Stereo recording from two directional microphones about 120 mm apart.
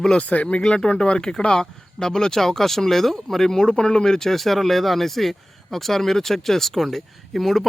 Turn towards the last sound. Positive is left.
turn(degrees=0)  # may be behind; listen again after turning